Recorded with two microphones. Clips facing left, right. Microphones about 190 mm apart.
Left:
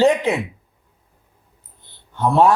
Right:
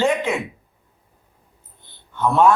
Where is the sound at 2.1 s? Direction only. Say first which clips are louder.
Left 1 dB; 35° left (ahead or behind).